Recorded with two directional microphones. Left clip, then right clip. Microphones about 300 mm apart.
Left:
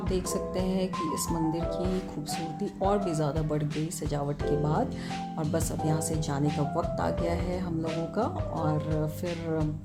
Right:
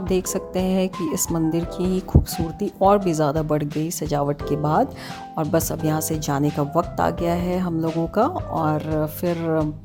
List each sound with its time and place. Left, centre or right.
0.1 s speech: right